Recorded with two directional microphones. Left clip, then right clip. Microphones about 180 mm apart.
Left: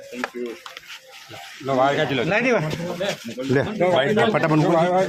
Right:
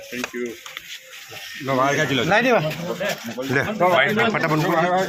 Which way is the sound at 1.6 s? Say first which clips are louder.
Even; 60° right (ahead or behind).